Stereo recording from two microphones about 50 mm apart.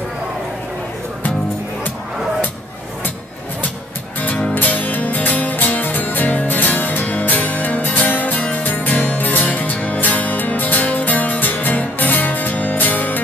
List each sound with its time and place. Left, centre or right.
4.6 s music: left